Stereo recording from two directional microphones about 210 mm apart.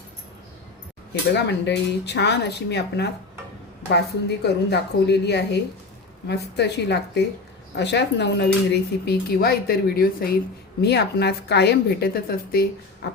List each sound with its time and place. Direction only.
1.5 s speech: 55° left (ahead or behind)